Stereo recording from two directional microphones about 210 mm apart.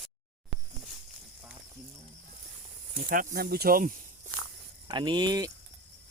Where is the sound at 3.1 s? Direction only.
45° right (ahead or behind).